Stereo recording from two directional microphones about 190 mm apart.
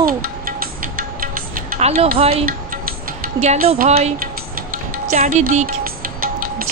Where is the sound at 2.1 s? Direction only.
30° right (ahead or behind).